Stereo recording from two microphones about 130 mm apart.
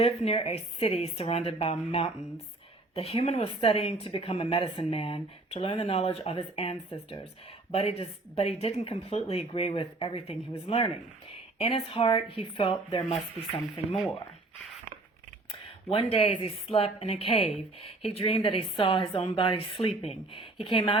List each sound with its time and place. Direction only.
0.0 s speech: 50° left (ahead or behind)
15.9 s speech: 45° left (ahead or behind)